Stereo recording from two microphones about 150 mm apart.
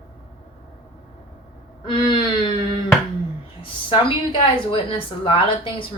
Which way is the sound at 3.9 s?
35° left (ahead or behind).